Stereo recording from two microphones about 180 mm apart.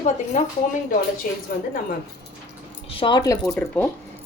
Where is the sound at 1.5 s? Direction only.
55° left (ahead or behind).